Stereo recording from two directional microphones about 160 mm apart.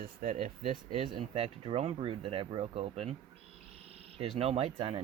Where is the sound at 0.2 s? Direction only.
55° right (ahead or behind).